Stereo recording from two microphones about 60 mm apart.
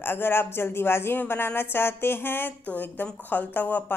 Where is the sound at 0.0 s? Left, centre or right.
Left.